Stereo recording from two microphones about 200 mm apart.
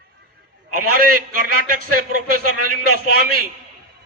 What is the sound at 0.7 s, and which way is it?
A man's voice, 45° right (ahead or behind).